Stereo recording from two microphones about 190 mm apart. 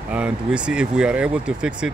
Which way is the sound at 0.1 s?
5° right (ahead or behind).